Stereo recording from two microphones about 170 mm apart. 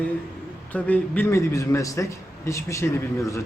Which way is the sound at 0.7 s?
10° left (ahead or behind).